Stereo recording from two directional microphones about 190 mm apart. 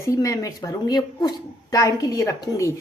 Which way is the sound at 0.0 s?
15° left (ahead or behind).